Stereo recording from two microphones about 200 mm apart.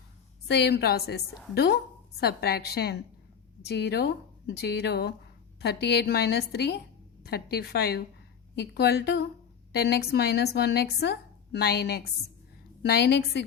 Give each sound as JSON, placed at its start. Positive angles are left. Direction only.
{"t": 0.4, "sound": "a woman's voice", "side_deg": 55}